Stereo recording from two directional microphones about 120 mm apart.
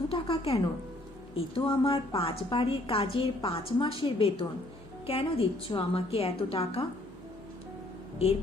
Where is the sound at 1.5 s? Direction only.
50° left (ahead or behind).